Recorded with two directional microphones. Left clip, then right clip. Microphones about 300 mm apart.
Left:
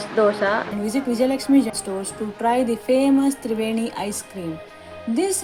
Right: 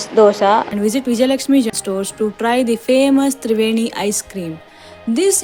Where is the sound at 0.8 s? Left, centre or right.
Right.